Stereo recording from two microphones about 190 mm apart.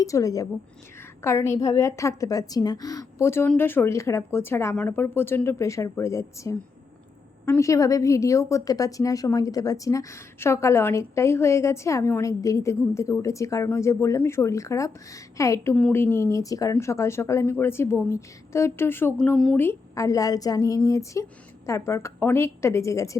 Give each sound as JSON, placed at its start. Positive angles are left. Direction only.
{"t": 0.0, "sound": "a woman's voice", "side_deg": 15}